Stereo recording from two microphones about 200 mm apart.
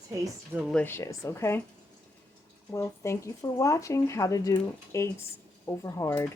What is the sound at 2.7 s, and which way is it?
Speech, 15° left (ahead or behind).